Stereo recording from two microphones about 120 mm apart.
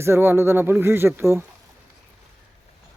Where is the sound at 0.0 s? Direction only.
20° right (ahead or behind).